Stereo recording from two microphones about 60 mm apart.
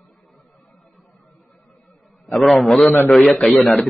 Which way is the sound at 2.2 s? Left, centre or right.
Centre.